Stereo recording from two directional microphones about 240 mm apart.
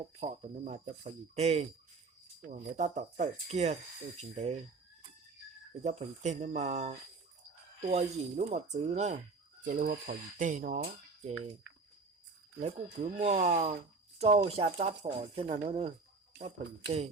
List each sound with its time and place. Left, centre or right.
0.2 s speech: right
5.8 s speech: right
12.5 s speech: right